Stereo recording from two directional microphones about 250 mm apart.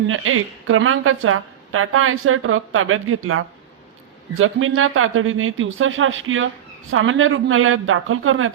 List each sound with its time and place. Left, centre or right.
0.1 s a woman's voice: right